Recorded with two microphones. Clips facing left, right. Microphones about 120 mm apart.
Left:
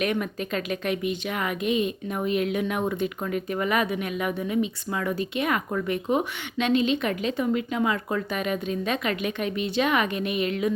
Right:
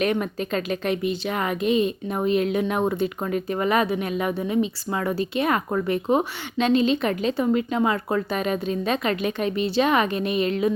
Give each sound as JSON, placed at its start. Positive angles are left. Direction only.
{"t": 0.0, "sound": "a woman's voice", "side_deg": -35}